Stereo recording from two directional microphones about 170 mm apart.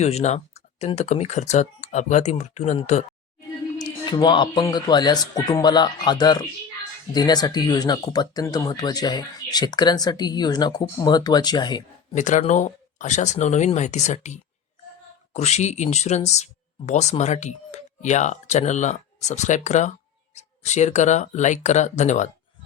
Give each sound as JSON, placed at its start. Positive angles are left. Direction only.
{"t": 0.0, "sound": "speech", "side_deg": 40}
{"t": 3.8, "sound": "speech", "side_deg": 25}
{"t": 12.1, "sound": "speech", "side_deg": 45}